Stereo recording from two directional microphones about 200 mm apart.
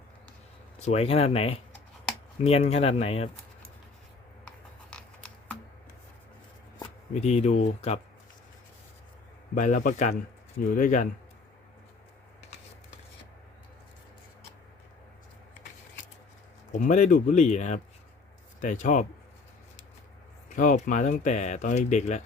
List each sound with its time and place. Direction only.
0.8 s speech: 30° left (ahead or behind)
4.4 s a sound: 5° left (ahead or behind)
7.1 s speech: 35° left (ahead or behind)
9.6 s speech: 40° left (ahead or behind)
16.7 s speech: 35° left (ahead or behind)
20.6 s speech: 40° left (ahead or behind)